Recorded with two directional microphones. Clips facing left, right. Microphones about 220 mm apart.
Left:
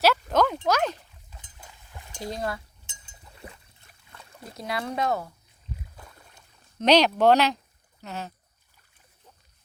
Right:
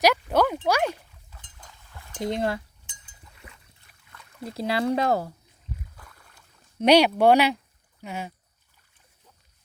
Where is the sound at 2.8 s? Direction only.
25° left (ahead or behind).